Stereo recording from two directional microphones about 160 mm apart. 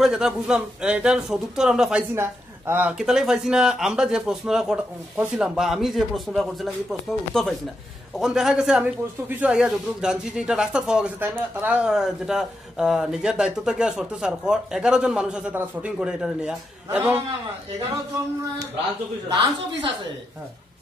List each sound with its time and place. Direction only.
0.0 s a man's voice: 5° right (ahead or behind)
3.0 s speech: 5° right (ahead or behind)
19.2 s a woman's voice: 20° right (ahead or behind)